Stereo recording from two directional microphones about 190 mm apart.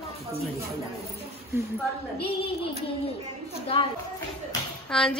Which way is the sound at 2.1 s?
30° left (ahead or behind).